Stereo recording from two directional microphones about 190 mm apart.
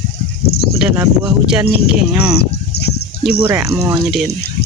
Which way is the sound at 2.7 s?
60° left (ahead or behind).